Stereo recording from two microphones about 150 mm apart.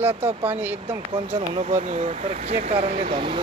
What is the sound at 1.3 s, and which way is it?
Speech, 50° right (ahead or behind).